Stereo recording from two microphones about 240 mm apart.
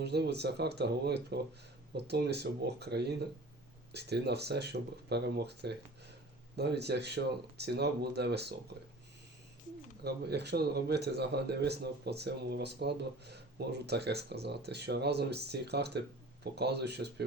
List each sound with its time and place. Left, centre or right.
0.0 s speech: right
10.0 s speech: right